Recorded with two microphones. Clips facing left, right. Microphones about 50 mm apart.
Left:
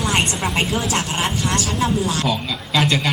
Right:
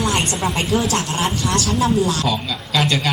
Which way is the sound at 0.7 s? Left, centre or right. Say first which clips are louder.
Right 2 dB; left.